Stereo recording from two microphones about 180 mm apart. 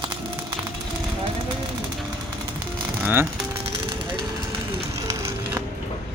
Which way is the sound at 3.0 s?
10° right (ahead or behind).